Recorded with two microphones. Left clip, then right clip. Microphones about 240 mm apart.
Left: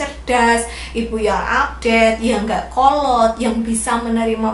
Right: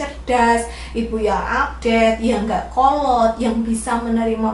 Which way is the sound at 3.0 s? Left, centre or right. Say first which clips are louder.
Left 2 dB; right.